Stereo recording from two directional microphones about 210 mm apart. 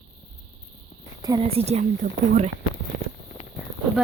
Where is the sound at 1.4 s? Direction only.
30° right (ahead or behind).